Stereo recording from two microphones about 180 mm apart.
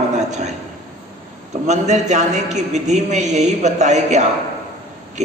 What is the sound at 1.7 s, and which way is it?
A man's voice, 40° right (ahead or behind).